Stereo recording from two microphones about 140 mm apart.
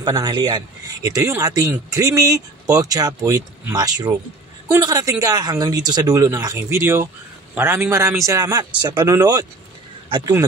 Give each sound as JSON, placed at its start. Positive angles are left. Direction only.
{"t": 0.0, "sound": "speech", "side_deg": -30}